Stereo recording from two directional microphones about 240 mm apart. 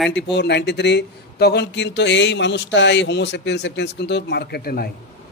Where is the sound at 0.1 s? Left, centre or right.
Left.